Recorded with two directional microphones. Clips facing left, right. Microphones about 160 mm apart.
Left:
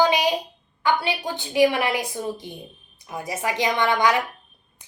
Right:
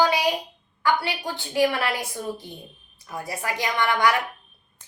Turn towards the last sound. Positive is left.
turn(degrees=20)  # may be behind; listen again after turning